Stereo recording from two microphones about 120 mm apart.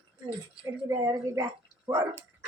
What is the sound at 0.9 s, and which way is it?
Speech, 30° right (ahead or behind).